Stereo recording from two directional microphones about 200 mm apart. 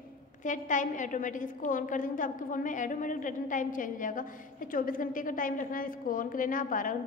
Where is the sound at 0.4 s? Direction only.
40° left (ahead or behind).